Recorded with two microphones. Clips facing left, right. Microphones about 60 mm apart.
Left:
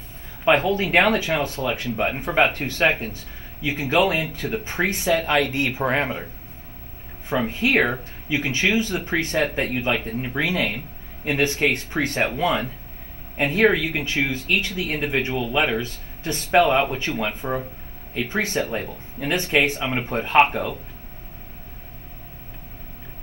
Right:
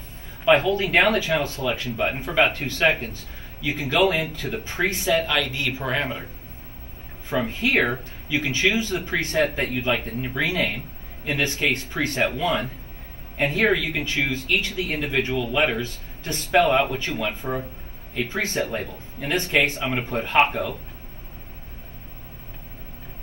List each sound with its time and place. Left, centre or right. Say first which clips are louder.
0.5 s speech: even; left
7.2 s speech: left 2 dB; left